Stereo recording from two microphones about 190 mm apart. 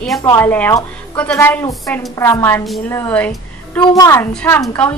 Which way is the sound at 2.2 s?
15° left (ahead or behind).